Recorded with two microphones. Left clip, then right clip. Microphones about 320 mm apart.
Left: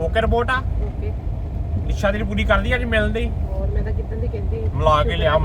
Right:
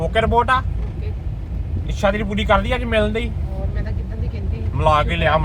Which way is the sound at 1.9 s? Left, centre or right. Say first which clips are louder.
Right 2 dB; centre.